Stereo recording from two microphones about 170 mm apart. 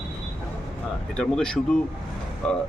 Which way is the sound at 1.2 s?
5° left (ahead or behind).